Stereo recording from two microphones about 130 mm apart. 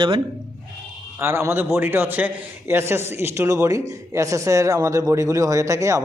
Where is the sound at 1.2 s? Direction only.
20° right (ahead or behind).